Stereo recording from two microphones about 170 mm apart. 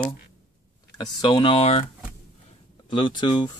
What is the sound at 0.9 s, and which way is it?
Speech, 25° left (ahead or behind).